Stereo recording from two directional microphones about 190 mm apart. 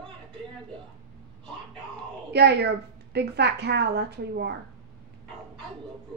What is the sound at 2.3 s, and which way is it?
A woman's voice, 60° right (ahead or behind).